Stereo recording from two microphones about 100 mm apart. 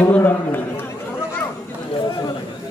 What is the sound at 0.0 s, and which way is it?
Speech, 20° left (ahead or behind).